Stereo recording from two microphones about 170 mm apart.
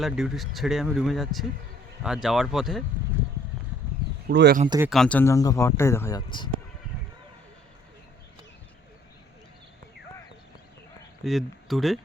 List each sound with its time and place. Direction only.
0.0 s speech: centre (ahead or behind)
4.3 s speech: 80° right
4.9 s speech: 5° left (ahead or behind); by 6.5 s 25° left (ahead or behind)
11.2 s speech: centre (ahead or behind)